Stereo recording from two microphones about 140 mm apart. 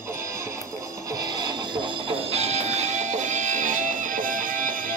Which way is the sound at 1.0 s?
30° right (ahead or behind).